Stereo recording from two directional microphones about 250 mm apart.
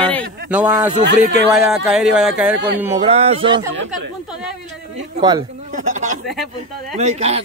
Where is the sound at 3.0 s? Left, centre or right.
Right.